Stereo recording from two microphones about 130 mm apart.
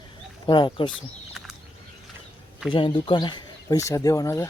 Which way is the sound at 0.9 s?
Centre (ahead or behind).